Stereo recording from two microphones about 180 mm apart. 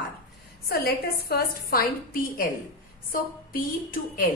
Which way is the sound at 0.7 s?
60° left (ahead or behind).